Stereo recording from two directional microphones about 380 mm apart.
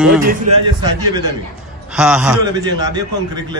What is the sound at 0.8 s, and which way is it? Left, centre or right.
Speech, centre.